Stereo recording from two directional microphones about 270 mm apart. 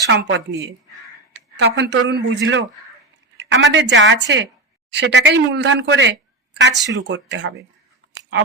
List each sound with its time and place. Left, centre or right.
0.1 s a woman's voice: right